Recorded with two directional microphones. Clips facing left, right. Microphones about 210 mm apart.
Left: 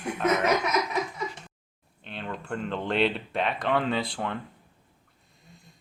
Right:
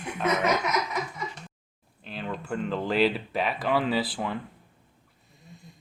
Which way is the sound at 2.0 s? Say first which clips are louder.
Right 2 dB; centre (ahead or behind).